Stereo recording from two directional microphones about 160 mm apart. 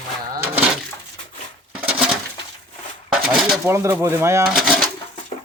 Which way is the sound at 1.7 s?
5° right (ahead or behind).